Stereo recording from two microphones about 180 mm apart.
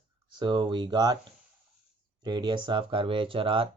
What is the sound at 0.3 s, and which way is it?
Speech, 25° right (ahead or behind).